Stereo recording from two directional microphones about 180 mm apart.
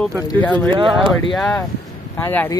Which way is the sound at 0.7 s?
25° right (ahead or behind).